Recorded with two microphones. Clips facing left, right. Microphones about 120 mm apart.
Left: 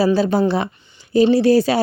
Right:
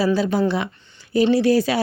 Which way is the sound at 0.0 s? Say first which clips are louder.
Left 3 dB; 35° left (ahead or behind).